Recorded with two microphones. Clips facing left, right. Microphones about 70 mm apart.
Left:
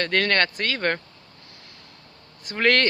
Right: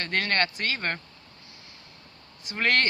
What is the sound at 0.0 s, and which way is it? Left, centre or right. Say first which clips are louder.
Speech: left 5 dB; left.